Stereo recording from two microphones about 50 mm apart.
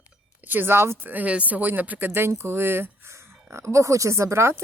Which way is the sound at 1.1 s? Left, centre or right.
Right.